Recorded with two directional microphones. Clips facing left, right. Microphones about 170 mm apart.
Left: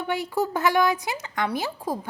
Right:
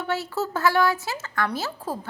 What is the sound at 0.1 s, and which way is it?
A woman's voice, 15° left (ahead or behind).